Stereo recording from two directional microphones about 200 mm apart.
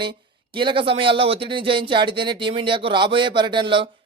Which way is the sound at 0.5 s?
25° right (ahead or behind).